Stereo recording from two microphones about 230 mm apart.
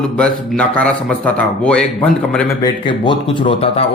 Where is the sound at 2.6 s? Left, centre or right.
Centre.